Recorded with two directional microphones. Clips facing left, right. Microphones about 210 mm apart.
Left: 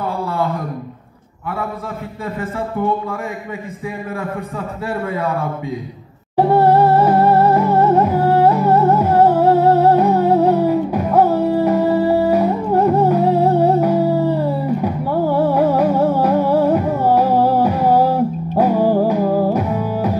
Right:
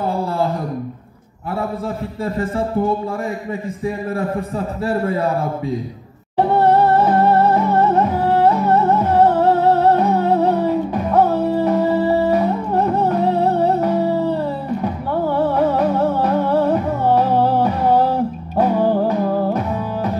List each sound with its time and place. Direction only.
2.3 s a man's voice: 35° right (ahead or behind)
4.8 s a man's voice: 35° right (ahead or behind)
6.3 s music: 5° left (ahead or behind)